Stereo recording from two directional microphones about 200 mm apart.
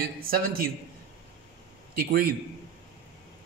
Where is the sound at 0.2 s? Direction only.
45° right (ahead or behind).